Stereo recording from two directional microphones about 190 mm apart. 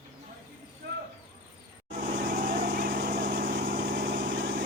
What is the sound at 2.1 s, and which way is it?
Vehicle, 50° right (ahead or behind).